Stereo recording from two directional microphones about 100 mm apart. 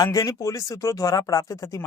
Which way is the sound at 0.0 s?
35° left (ahead or behind).